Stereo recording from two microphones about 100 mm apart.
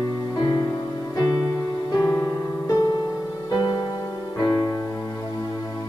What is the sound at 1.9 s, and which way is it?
Music, 35° left (ahead or behind).